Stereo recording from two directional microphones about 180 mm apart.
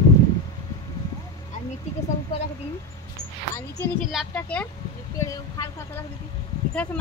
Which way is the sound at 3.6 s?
15° left (ahead or behind).